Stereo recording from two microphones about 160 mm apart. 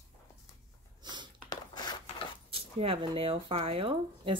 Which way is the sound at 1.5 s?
25° left (ahead or behind).